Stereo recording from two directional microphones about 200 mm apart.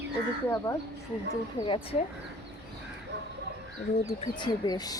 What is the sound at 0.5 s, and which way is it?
Speech, 15° left (ahead or behind).